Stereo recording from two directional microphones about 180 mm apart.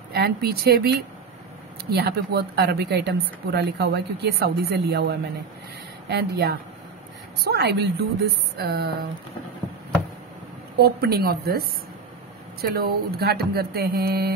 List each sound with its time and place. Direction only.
0.1 s speech: 60° right (ahead or behind)
10.8 s speech: 60° right (ahead or behind)
12.7 s speech: 60° right (ahead or behind)